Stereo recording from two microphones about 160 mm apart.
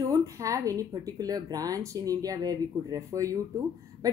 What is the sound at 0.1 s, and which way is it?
A woman's voice, 20° right (ahead or behind).